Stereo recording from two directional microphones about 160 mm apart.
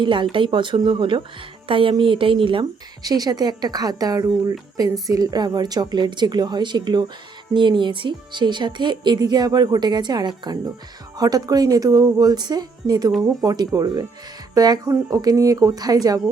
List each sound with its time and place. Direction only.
0.0 s speech: 30° right (ahead or behind)